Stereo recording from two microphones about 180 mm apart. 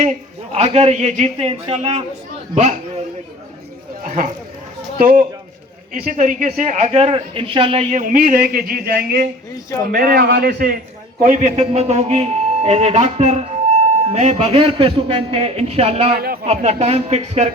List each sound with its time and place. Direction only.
0.5 s a man's voice: 35° right (ahead or behind)
4.0 s a man's voice: 45° right (ahead or behind)
11.2 s a man's voice: 45° right (ahead or behind)
16.1 s a man's voice: 60° right (ahead or behind)
16.5 s a man's voice: 40° right (ahead or behind)